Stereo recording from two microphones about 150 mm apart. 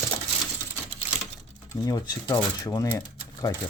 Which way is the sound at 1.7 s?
25° left (ahead or behind).